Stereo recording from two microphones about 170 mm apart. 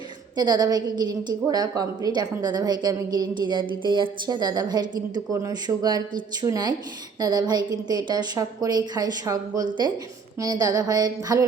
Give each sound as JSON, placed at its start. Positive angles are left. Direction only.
{"t": 0.3, "sound": "a woman's voice", "side_deg": -25}